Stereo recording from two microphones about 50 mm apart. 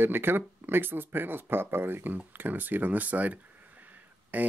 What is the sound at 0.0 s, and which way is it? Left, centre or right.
Speech, right.